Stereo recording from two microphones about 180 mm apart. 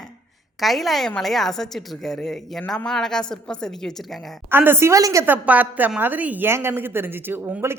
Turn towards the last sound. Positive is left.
turn(degrees=-10)  # may be behind; listen again after turning